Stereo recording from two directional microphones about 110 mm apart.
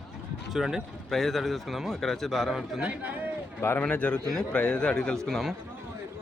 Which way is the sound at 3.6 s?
20° left (ahead or behind).